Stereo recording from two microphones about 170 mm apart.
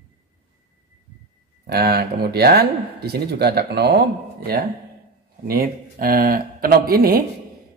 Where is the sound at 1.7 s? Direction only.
70° right (ahead or behind).